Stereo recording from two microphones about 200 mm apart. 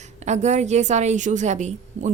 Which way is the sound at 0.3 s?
35° right (ahead or behind).